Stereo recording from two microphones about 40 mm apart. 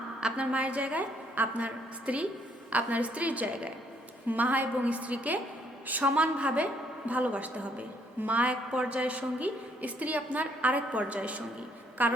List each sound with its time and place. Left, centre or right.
0.2 s a woman's voice: right